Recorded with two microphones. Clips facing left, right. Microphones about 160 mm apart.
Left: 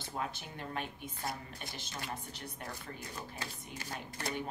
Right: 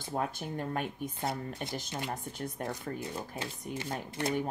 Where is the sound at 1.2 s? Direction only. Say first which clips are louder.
Right 6 dB; 25° right (ahead or behind).